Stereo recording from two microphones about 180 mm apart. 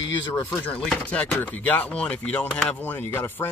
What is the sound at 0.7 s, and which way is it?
Speech, 5° left (ahead or behind).